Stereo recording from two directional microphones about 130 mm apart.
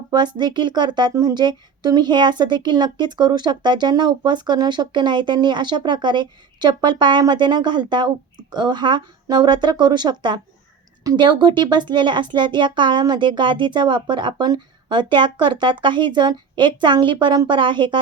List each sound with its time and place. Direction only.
0.1 s a woman's voice: 35° right (ahead or behind)